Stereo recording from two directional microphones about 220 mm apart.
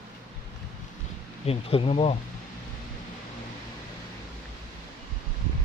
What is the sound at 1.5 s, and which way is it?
Speech, 25° left (ahead or behind).